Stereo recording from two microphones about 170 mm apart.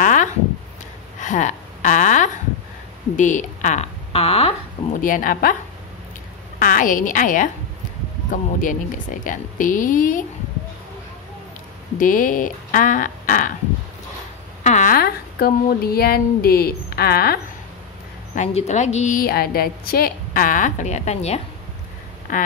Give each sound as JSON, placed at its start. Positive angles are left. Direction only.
{"t": 0.0, "sound": "a sound", "side_deg": 50}
{"t": 1.2, "sound": "a woman's voice", "side_deg": 45}
{"t": 5.0, "sound": "speech", "side_deg": 55}
{"t": 6.6, "sound": "a woman's voice", "side_deg": 55}
{"t": 12.0, "sound": "a woman's voice", "side_deg": 55}
{"t": 14.6, "sound": "speech", "side_deg": 45}
{"t": 18.3, "sound": "a woman's voice", "side_deg": 45}